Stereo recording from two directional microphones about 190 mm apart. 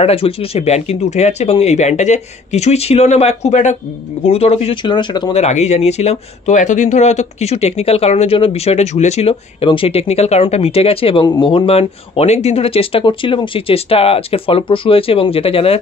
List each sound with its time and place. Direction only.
0.0 s speech: 30° left (ahead or behind)
5.4 s speech: 35° left (ahead or behind)